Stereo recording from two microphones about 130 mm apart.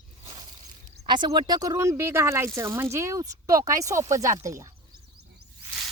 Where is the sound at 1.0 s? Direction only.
35° right (ahead or behind).